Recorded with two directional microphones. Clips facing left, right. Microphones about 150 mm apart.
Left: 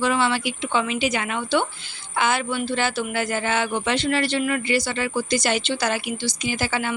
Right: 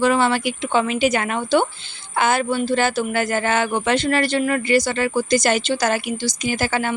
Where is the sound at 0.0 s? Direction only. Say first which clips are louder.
Right 4 dB; 45° right (ahead or behind).